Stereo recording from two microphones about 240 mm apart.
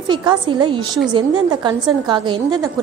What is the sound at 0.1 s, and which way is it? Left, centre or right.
A woman's voice, centre.